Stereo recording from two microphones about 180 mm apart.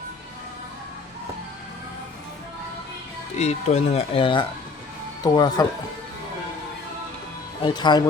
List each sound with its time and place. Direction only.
3.3 s speech: 35° left (ahead or behind); by 5.6 s 20° left (ahead or behind)
7.6 s speech: 25° left (ahead or behind)